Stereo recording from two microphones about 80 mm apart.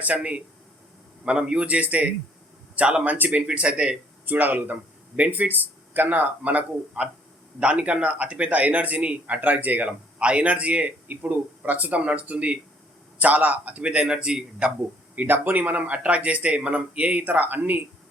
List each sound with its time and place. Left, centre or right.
0.0 s speech: centre
15.1 s speech: right